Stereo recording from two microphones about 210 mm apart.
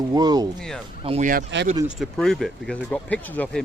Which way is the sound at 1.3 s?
50° right (ahead or behind).